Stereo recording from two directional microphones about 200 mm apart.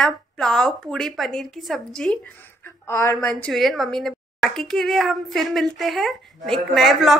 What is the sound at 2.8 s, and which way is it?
Speech, 15° left (ahead or behind).